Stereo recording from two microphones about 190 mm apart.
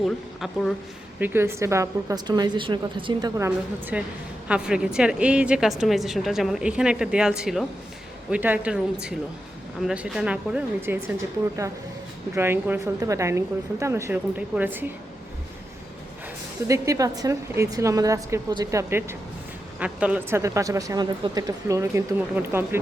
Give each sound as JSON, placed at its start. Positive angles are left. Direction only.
{"t": 0.0, "sound": "a woman's voice", "side_deg": 0}
{"t": 1.2, "sound": "a woman's voice", "side_deg": -10}
{"t": 12.3, "sound": "speech", "side_deg": -10}
{"t": 16.6, "sound": "speech", "side_deg": -15}